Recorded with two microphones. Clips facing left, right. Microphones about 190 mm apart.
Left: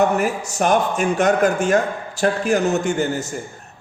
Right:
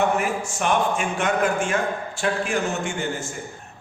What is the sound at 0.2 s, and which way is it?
A woman's voice, 40° left (ahead or behind).